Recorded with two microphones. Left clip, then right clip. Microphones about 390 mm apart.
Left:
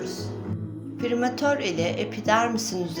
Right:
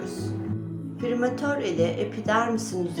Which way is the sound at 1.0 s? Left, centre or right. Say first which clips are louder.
Left 2 dB; centre.